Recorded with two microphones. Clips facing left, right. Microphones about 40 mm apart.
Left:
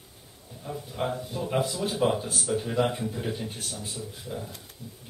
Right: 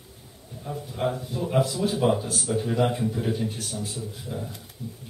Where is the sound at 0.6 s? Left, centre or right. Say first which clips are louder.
Right 3 dB; centre.